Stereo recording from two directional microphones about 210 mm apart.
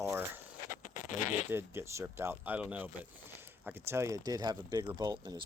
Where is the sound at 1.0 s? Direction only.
35° left (ahead or behind).